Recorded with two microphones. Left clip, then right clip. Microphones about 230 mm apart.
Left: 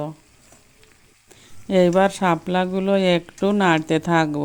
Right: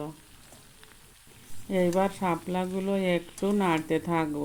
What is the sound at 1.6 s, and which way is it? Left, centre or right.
Speech, left.